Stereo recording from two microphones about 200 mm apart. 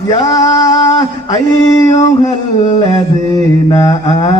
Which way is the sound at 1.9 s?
35° left (ahead or behind).